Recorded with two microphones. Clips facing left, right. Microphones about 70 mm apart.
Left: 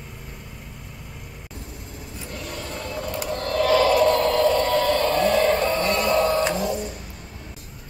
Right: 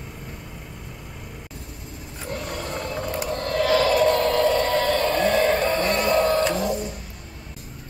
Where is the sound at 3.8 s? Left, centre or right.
Left.